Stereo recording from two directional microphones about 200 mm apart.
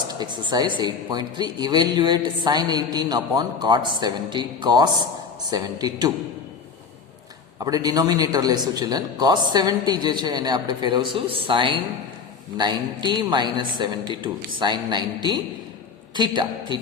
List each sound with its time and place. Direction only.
0.1 s speech: 20° right (ahead or behind)
7.6 s speech: 20° right (ahead or behind)